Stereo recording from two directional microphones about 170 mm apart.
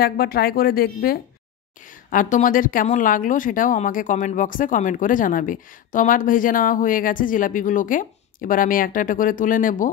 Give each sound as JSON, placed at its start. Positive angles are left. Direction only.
{"t": 0.0, "sound": "speech", "side_deg": 60}
{"t": 2.0, "sound": "speech", "side_deg": 50}